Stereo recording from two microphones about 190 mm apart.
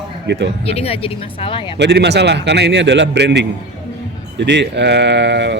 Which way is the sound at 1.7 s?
65° right (ahead or behind).